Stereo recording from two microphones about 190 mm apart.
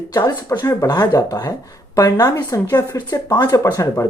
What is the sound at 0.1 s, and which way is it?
Speech, 20° left (ahead or behind).